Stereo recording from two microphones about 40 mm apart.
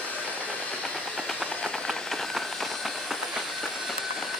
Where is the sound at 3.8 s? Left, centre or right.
Centre.